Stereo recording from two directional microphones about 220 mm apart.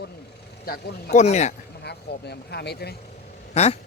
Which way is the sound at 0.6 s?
45° left (ahead or behind).